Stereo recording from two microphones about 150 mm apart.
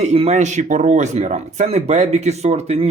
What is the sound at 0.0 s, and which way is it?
Speech, 45° right (ahead or behind).